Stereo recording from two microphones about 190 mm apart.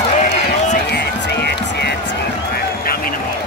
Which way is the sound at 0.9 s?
60° left (ahead or behind).